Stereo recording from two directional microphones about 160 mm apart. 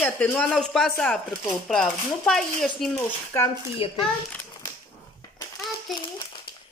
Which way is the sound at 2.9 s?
15° left (ahead or behind).